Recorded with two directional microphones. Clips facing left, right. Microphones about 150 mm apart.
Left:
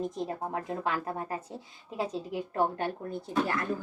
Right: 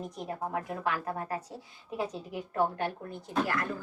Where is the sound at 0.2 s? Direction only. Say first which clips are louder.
Left 1 dB; 30° left (ahead or behind).